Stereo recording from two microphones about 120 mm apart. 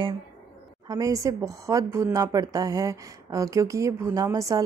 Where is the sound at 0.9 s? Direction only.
30° right (ahead or behind).